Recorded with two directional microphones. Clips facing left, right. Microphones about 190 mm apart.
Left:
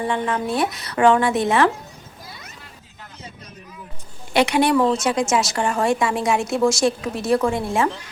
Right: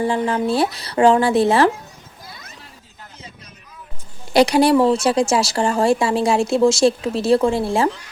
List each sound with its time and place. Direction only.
0.0 s speech: 30° right (ahead or behind)
4.3 s speech: 35° right (ahead or behind)